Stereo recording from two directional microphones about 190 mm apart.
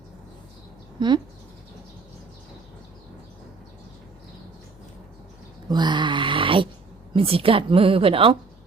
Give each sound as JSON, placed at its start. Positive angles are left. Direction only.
{"t": 0.9, "sound": "speech", "side_deg": -25}
{"t": 5.6, "sound": "a sound", "side_deg": -20}
{"t": 7.1, "sound": "a woman's voice", "side_deg": -30}